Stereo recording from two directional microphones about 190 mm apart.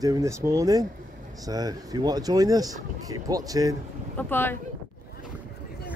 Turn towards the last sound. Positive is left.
turn(degrees=10)  # may be behind; listen again after turning